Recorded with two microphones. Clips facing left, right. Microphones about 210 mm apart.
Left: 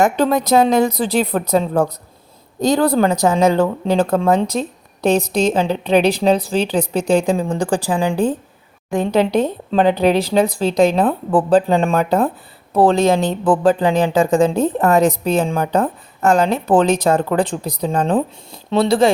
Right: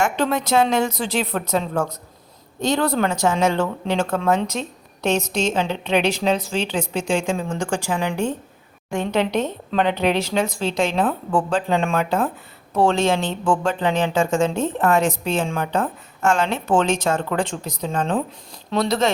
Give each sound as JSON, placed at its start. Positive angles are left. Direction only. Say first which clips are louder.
{"t": 0.0, "sound": "speech", "louder": "left 6 dB", "side_deg": 35}